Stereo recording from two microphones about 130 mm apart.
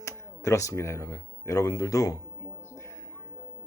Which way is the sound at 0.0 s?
25° left (ahead or behind).